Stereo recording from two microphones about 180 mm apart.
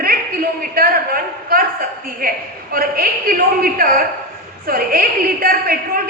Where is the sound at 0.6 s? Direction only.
55° right (ahead or behind).